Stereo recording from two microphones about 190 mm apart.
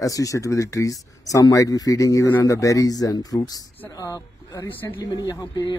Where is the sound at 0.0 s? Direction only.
20° left (ahead or behind).